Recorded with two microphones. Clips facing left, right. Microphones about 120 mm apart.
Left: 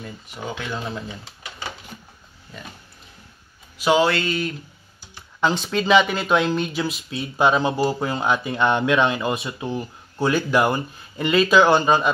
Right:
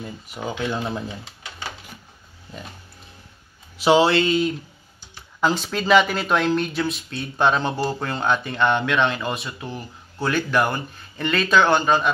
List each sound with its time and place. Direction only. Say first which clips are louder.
0.0 s speech: right 2 dB; 5° right (ahead or behind)
0.8 s speech: right 2 dB; 25° right (ahead or behind)
3.8 s speech: right 2 dB; 25° right (ahead or behind)
5.4 s speech: left 1 dB; centre (ahead or behind)